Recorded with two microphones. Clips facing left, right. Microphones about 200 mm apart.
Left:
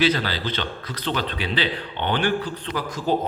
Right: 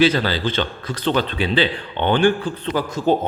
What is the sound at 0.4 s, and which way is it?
Speech, 25° right (ahead or behind).